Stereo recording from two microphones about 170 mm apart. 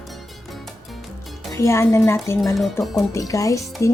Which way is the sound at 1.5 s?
15° left (ahead or behind).